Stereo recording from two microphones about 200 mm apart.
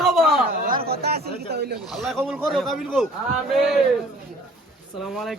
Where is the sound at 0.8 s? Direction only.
50° right (ahead or behind).